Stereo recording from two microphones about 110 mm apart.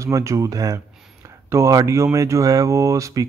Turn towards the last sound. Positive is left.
turn(degrees=-30)  # may be behind; listen again after turning